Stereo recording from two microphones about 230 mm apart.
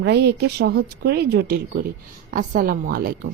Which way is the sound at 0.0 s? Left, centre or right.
Right.